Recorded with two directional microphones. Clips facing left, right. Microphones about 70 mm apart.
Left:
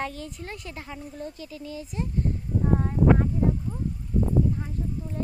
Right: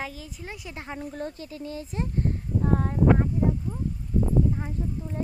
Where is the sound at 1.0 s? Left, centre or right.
Right.